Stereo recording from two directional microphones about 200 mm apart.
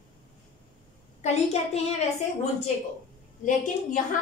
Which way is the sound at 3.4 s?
40° left (ahead or behind).